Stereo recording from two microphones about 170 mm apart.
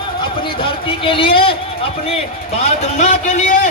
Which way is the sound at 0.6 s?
30° left (ahead or behind).